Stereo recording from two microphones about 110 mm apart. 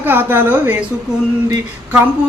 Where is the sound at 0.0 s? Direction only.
20° right (ahead or behind).